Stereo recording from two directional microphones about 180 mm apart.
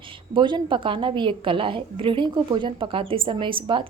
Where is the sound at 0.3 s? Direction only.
25° right (ahead or behind).